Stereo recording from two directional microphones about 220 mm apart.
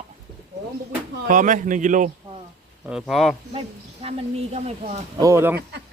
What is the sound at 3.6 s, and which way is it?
Speech, 30° right (ahead or behind).